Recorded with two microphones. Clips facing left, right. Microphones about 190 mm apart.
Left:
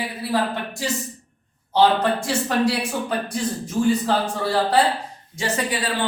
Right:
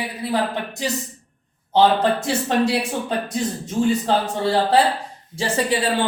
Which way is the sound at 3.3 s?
25° right (ahead or behind).